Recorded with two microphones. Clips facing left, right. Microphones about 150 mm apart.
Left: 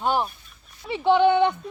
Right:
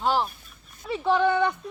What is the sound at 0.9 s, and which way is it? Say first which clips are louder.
Speech: left 4 dB; 25° left (ahead or behind).